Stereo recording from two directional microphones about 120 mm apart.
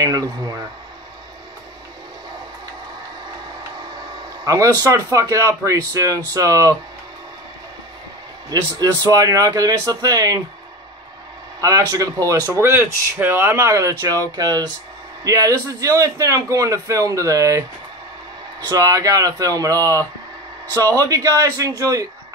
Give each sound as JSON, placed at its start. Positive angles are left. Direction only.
{"t": 0.0, "sound": "a man's voice", "side_deg": -30}
{"t": 4.5, "sound": "a man's voice", "side_deg": -25}
{"t": 8.5, "sound": "speech", "side_deg": -30}
{"t": 11.6, "sound": "a man's voice", "side_deg": -30}
{"t": 18.7, "sound": "a man's voice", "side_deg": -30}